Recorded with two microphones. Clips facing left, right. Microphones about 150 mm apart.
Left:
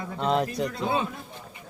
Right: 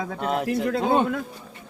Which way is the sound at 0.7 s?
60° right (ahead or behind).